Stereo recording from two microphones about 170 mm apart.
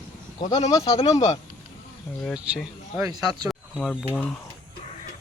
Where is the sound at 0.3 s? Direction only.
25° left (ahead or behind).